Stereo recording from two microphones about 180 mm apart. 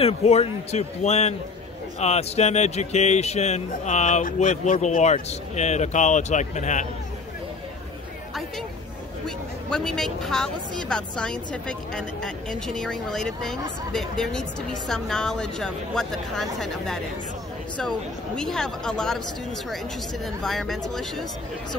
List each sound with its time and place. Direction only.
0.0 s a man's voice: 35° left (ahead or behind)
9.2 s a woman's voice: 5° left (ahead or behind)
20.4 s a woman's voice: centre (ahead or behind)